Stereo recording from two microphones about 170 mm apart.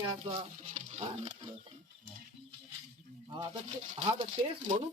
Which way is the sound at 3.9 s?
45° right (ahead or behind).